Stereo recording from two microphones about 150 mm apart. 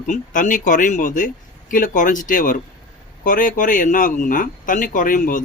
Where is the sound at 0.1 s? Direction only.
60° left (ahead or behind).